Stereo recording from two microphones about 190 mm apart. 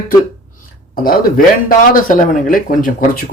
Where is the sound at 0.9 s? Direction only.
50° left (ahead or behind).